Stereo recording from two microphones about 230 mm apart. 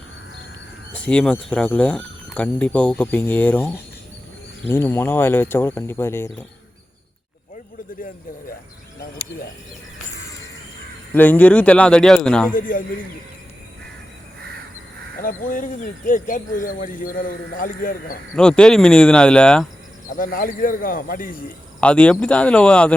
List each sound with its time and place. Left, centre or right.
0.9 s speech: centre
4.7 s speech: centre
11.1 s speech: centre
12.5 s speech: left
15.2 s speech: left
18.3 s speech: centre
20.1 s speech: left
21.8 s speech: centre